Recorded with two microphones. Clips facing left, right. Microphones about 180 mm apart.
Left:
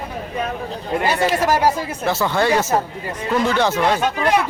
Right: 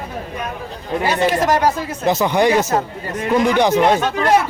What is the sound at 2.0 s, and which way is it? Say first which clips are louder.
A man's voice: right 4 dB; 20° right (ahead or behind).